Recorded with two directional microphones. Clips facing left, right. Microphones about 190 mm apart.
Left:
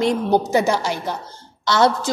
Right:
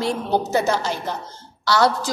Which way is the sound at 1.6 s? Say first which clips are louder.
Left 1 dB; 25° left (ahead or behind).